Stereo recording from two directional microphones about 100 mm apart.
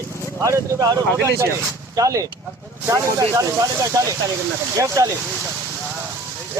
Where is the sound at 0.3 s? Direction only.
35° right (ahead or behind).